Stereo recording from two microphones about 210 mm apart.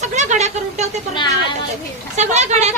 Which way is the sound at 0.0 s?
35° right (ahead or behind).